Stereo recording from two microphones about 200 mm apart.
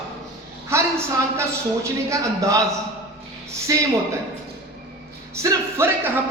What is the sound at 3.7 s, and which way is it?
Speech, 15° right (ahead or behind).